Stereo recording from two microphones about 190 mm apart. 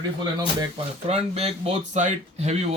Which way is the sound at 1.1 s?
35° right (ahead or behind).